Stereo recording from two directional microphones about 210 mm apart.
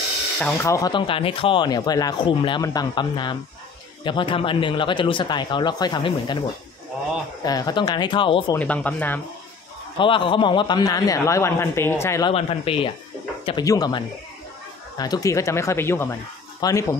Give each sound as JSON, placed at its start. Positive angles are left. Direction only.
{"t": 0.7, "sound": "speech", "side_deg": 15}
{"t": 7.4, "sound": "speech", "side_deg": 20}
{"t": 8.5, "sound": "a man's voice", "side_deg": 5}
{"t": 9.9, "sound": "a man's voice", "side_deg": 25}
{"t": 12.3, "sound": "a man's voice", "side_deg": 25}